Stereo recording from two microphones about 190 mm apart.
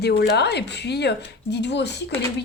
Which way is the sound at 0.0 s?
60° left (ahead or behind).